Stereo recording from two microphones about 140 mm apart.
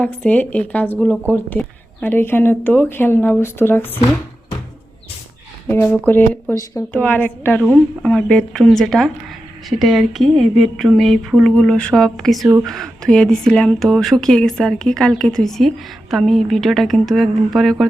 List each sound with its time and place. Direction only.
0.0 s speech: 10° left (ahead or behind)
5.6 s speech: 15° left (ahead or behind); by 17.8 s centre (ahead or behind)